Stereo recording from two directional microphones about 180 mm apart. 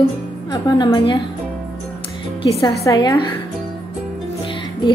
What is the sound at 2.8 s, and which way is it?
Speech, 20° left (ahead or behind).